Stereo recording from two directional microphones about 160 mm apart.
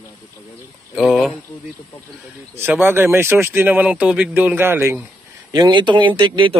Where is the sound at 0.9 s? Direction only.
5° right (ahead or behind).